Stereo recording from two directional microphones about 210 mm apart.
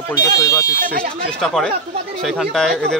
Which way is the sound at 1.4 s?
Centre (ahead or behind).